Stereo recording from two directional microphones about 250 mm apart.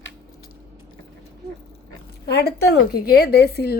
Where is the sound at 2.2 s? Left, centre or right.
Left.